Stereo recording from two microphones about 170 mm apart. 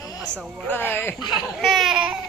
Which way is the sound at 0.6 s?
10° left (ahead or behind).